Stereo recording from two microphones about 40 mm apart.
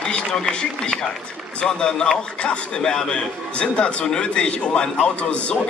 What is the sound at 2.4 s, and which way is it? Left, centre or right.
Speech, left.